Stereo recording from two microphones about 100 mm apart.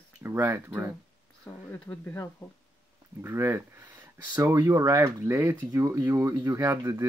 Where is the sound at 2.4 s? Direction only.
25° left (ahead or behind).